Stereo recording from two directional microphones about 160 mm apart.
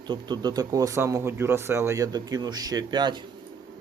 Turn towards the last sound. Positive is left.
turn(degrees=-30)  # may be behind; listen again after turning